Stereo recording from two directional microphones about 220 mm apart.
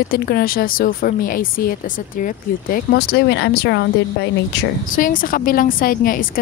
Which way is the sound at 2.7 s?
45° left (ahead or behind).